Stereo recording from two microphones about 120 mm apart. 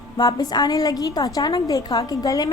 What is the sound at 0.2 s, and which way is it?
A woman's voice, 35° left (ahead or behind).